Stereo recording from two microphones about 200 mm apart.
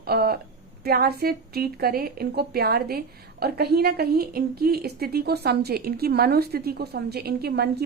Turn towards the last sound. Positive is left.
turn(degrees=-50)  # may be behind; listen again after turning